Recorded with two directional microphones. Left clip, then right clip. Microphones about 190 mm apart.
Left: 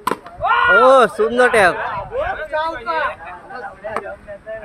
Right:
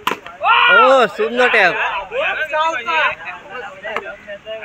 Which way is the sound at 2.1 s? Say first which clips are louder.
Right 3 dB; 30° right (ahead or behind).